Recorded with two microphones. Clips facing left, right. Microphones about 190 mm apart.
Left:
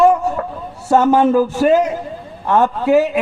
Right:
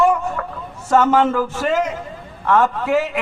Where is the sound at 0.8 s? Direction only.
20° left (ahead or behind).